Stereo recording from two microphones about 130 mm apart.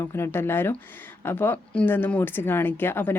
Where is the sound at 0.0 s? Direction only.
20° left (ahead or behind).